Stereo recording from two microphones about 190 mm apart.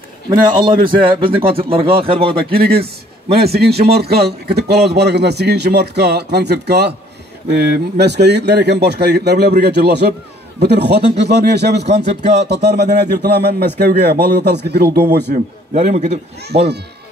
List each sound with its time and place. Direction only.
0.3 s speech: 25° right (ahead or behind)
2.5 s a man's voice: 55° right (ahead or behind)
15.7 s a man's voice: 40° right (ahead or behind)
16.4 s a man's voice: 60° right (ahead or behind)